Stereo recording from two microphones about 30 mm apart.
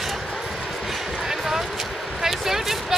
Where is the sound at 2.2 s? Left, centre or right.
Centre.